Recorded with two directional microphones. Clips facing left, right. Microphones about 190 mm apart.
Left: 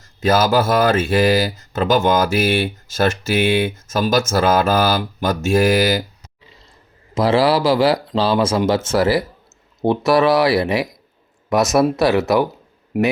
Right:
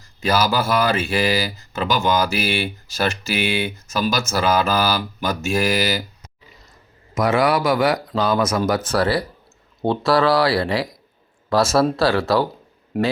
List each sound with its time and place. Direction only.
0.3 s speech: 45° left (ahead or behind)
6.4 s grunt: 25° left (ahead or behind)
7.1 s speech: 30° left (ahead or behind)